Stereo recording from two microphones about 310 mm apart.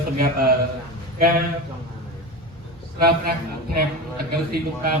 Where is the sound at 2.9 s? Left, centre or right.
Right.